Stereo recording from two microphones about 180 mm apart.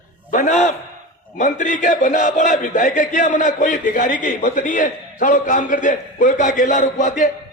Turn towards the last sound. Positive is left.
turn(degrees=45)  # may be behind; listen again after turning